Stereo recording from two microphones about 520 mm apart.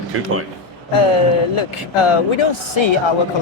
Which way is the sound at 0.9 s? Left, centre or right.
Left.